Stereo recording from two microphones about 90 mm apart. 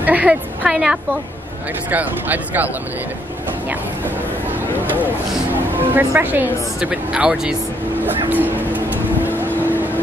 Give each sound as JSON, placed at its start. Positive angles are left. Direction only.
{"t": 0.0, "sound": "a woman's voice", "side_deg": -15}
{"t": 1.9, "sound": "a woman's voice", "side_deg": -20}
{"t": 5.5, "sound": "a woman's voice", "side_deg": -20}
{"t": 6.8, "sound": "speech", "side_deg": -10}
{"t": 8.3, "sound": "vehicle", "side_deg": -20}